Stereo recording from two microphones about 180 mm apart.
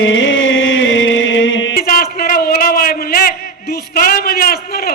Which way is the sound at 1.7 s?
55° left (ahead or behind).